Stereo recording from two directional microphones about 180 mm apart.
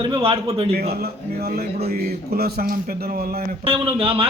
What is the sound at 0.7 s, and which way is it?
A man's voice, 60° right (ahead or behind).